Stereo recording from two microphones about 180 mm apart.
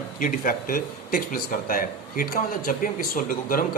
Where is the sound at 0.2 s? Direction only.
50° left (ahead or behind).